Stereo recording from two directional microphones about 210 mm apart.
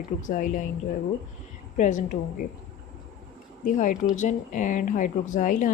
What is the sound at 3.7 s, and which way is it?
Speech, 35° left (ahead or behind).